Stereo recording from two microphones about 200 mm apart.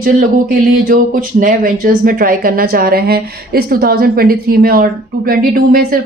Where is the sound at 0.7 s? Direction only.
45° right (ahead or behind).